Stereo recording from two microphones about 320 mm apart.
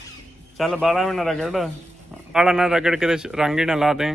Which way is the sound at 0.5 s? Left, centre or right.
Centre.